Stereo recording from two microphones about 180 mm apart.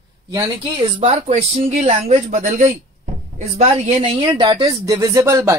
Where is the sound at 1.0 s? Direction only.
35° right (ahead or behind).